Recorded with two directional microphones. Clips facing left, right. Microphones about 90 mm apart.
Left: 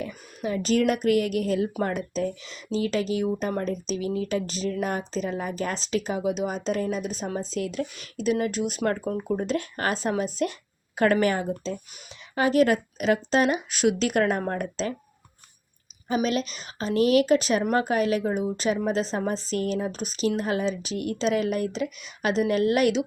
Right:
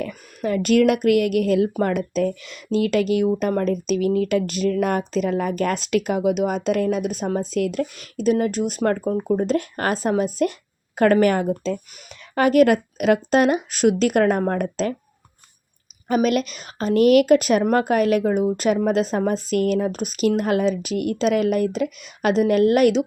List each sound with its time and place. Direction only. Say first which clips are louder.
0.0 s a woman's voice: right 5 dB; 70° right (ahead or behind); by 14.9 s 45° right (ahead or behind)
16.0 s a woman's voice: right 6 dB; 55° right (ahead or behind)